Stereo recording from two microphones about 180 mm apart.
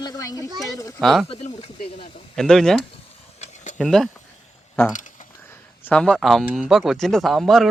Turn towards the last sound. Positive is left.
turn(degrees=0)  # may be behind; listen again after turning